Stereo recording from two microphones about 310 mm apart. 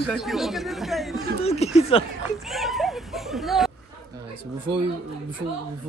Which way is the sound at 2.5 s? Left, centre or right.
Centre.